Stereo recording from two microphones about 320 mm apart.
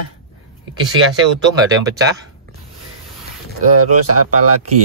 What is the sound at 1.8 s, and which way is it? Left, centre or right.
Speech, centre.